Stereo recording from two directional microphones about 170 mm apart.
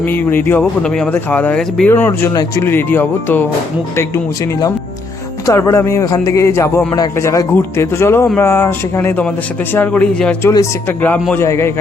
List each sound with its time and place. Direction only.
0.0 s speech: 10° left (ahead or behind)
5.5 s speech: 20° left (ahead or behind)